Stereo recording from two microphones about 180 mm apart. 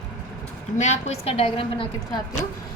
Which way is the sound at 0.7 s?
40° left (ahead or behind).